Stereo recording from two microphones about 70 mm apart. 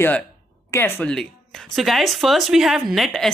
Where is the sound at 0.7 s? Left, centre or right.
Left.